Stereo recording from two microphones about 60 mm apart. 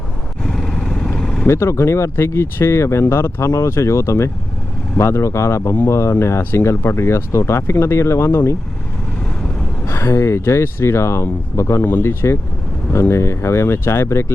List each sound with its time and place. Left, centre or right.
0.4 s vehicle: centre
1.5 s speech: left
9.8 s speech: left